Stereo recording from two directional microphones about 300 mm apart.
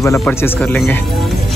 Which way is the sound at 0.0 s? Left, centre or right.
Centre.